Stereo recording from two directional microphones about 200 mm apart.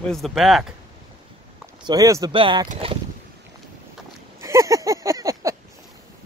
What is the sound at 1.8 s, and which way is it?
Speech, 15° right (ahead or behind).